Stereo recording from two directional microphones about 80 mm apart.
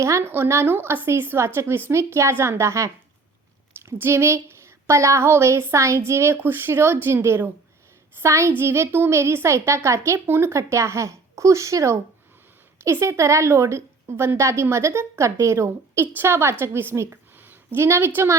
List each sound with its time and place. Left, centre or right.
0.0 s a woman's voice: right